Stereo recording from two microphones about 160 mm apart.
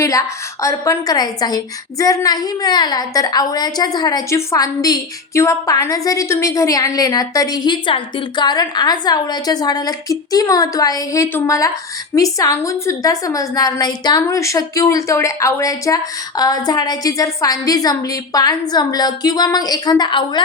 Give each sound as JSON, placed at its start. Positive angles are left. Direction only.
{"t": 0.0, "sound": "a woman's voice", "side_deg": 20}